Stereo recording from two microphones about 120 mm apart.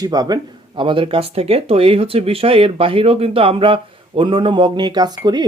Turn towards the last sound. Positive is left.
turn(degrees=-35)  # may be behind; listen again after turning